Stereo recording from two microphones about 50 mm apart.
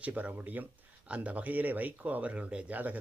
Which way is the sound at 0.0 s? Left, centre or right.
Right.